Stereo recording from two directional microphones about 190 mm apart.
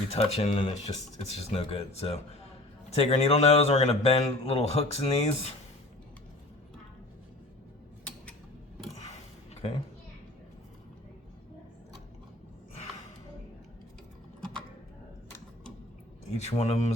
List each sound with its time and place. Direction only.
0.1 s a man's voice: 35° left (ahead or behind)
16.4 s a man's voice: 35° left (ahead or behind)